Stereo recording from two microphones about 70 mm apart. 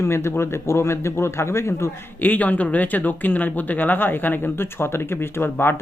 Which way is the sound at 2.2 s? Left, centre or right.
Left.